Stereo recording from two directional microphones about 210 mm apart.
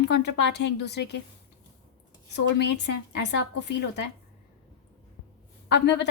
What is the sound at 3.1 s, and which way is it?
Speech, 55° left (ahead or behind).